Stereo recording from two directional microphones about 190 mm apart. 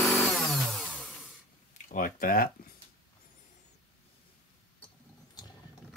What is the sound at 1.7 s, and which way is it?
Speech, 45° left (ahead or behind).